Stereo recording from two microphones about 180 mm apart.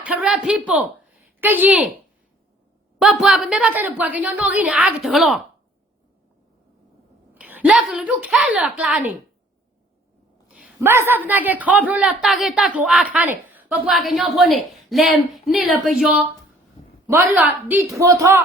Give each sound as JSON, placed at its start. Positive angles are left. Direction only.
{"t": 0.0, "sound": "a woman's voice", "side_deg": -5}
{"t": 3.0, "sound": "a woman's voice", "side_deg": 0}
{"t": 7.3, "sound": "a woman's voice", "side_deg": -10}
{"t": 10.5, "sound": "a woman's voice", "side_deg": -10}
{"t": 17.3, "sound": "a woman's voice", "side_deg": -10}